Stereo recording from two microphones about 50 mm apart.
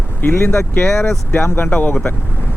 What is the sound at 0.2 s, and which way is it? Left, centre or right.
Speech, left.